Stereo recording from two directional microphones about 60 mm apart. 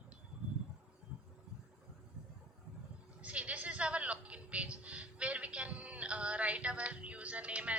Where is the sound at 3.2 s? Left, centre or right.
Right.